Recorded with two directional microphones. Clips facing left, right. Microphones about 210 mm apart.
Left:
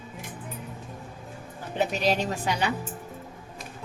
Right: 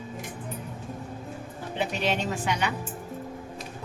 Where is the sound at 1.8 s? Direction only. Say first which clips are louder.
Left 3 dB; 40° left (ahead or behind).